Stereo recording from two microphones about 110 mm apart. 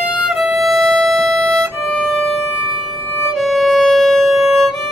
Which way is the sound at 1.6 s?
Centre (ahead or behind).